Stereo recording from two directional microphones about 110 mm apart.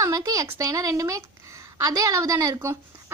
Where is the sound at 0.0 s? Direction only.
30° right (ahead or behind).